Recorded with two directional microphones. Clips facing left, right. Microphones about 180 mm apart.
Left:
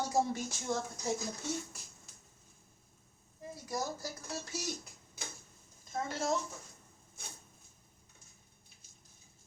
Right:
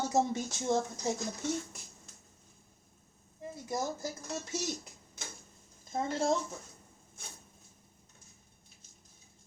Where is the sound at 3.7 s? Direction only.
20° right (ahead or behind).